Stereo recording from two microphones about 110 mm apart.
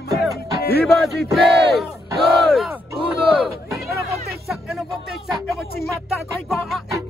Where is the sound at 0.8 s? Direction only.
Centre (ahead or behind).